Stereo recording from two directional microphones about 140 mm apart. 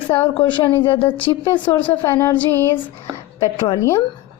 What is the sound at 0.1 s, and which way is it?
Speech, 10° left (ahead or behind).